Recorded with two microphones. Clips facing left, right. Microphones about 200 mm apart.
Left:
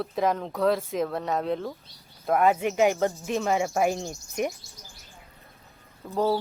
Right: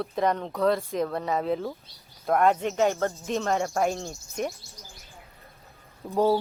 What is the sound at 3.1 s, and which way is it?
Speech, centre (ahead or behind).